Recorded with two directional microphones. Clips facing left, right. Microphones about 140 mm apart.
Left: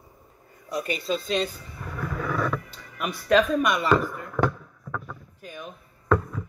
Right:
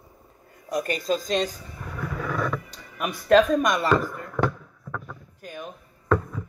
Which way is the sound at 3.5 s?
40° right (ahead or behind).